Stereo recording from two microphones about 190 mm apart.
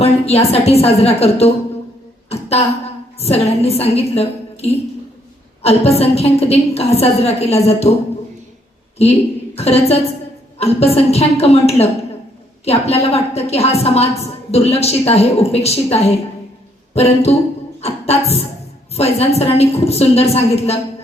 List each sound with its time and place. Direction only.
0.0 s a woman's voice: 30° left (ahead or behind)
9.6 s a woman's voice: 30° left (ahead or behind)